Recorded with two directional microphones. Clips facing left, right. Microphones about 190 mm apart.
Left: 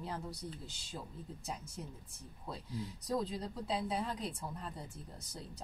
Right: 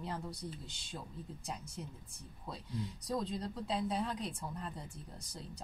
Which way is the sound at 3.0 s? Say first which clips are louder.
Left 1 dB; 5° left (ahead or behind).